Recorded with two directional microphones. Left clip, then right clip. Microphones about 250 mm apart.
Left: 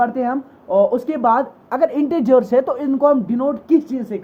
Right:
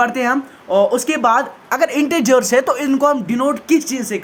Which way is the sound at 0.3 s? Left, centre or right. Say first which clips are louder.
Right 4 dB; right.